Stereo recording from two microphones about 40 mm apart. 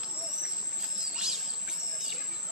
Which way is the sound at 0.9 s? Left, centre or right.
Centre.